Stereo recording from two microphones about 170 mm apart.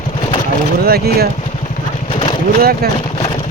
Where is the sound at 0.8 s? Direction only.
65° right (ahead or behind).